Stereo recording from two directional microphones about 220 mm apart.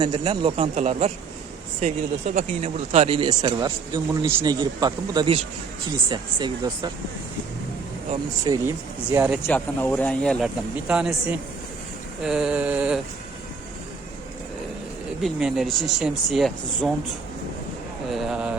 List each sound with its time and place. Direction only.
0.0 s speech: 20° right (ahead or behind)
2.3 s speech: 30° right (ahead or behind)
8.1 s speech: 15° right (ahead or behind)
9.1 s speech: 5° right (ahead or behind)
9.5 s speech: 5° left (ahead or behind)
15.2 s speech: centre (ahead or behind)
18.1 s speech: centre (ahead or behind)